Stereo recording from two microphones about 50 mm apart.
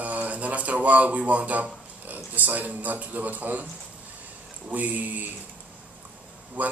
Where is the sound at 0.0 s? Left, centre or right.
Right.